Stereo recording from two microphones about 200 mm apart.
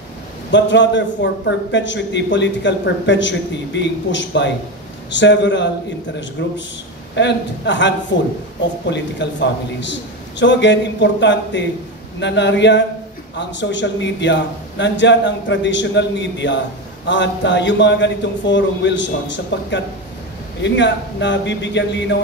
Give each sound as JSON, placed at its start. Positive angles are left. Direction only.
{"t": 0.5, "sound": "a man's voice", "side_deg": 65}